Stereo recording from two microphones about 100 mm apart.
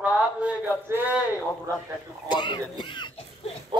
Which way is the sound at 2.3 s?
50° left (ahead or behind).